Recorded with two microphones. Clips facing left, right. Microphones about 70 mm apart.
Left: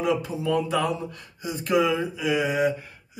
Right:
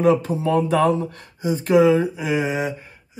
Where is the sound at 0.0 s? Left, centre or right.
Right.